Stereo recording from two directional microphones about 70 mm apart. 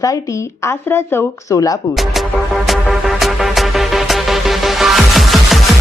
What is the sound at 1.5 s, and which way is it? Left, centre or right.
Speech, left.